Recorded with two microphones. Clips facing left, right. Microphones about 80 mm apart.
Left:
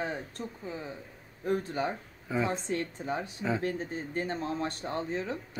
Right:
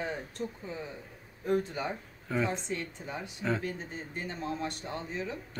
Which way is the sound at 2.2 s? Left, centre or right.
Centre.